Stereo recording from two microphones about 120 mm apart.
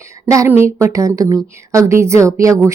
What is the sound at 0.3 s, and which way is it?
A woman's voice, 25° right (ahead or behind).